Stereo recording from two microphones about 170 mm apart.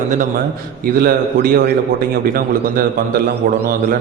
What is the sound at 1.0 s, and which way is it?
A man's voice, 65° right (ahead or behind).